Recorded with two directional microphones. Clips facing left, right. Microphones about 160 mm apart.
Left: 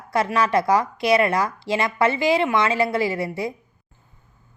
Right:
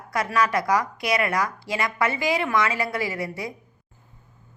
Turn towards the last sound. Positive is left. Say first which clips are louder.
# left 5 dB
turn(degrees=25)  # may be behind; listen again after turning